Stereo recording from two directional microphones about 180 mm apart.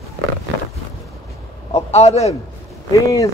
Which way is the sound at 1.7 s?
35° left (ahead or behind).